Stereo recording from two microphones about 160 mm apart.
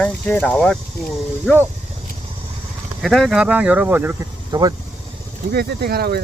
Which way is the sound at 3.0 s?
Centre (ahead or behind).